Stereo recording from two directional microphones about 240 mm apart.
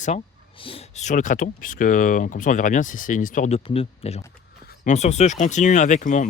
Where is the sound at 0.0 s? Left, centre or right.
Left.